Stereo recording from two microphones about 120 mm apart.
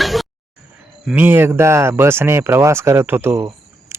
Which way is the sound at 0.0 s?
Centre (ahead or behind).